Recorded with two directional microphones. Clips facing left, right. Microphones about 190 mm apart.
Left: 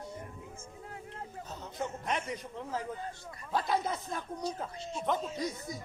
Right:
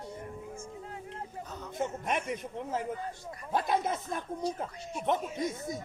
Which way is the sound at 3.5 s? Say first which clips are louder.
Right 2 dB; 20° right (ahead or behind).